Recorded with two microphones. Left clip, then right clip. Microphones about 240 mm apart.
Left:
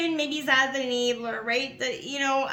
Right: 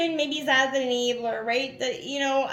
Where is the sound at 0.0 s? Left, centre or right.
Left.